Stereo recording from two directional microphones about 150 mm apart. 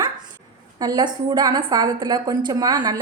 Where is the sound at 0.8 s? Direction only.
25° right (ahead or behind).